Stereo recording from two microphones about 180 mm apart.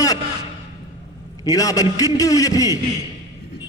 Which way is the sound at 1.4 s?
20° left (ahead or behind).